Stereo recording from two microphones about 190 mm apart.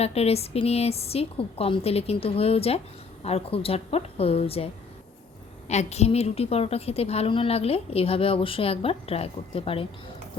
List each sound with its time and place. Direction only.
0.0 s a woman's voice: 35° left (ahead or behind)